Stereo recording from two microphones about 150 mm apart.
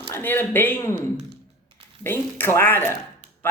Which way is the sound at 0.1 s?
15° left (ahead or behind).